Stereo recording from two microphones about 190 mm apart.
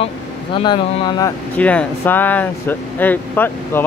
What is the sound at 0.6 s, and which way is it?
Speech, 25° left (ahead or behind).